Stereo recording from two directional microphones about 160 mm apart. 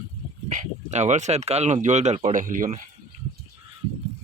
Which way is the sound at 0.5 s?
45° right (ahead or behind).